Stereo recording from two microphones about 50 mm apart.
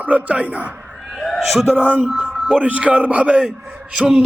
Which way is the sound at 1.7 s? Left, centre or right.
Right.